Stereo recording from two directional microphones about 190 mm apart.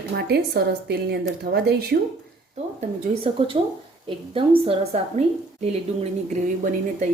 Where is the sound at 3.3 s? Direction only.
35° right (ahead or behind).